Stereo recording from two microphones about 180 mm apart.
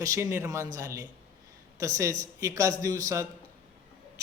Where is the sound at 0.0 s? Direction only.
15° right (ahead or behind).